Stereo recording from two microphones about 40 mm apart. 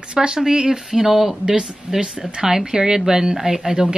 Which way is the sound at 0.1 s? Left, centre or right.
Right.